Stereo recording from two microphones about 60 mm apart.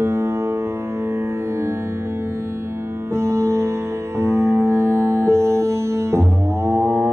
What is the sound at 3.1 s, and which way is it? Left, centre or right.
Music, right.